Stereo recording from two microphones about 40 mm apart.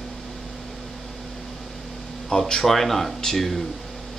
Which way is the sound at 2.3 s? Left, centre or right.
Centre.